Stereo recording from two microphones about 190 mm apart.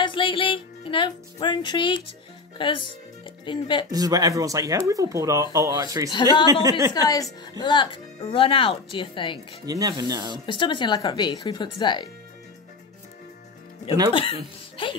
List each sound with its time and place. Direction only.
0.0 s music: 25° left (ahead or behind)
2.5 s speech: 25° left (ahead or behind)
3.9 s speech: 20° right (ahead or behind)
6.9 s speech: 20° left (ahead or behind)
9.7 s speech: 20° right (ahead or behind)
10.4 s speech: 25° left (ahead or behind)
14.8 s speech: 30° left (ahead or behind)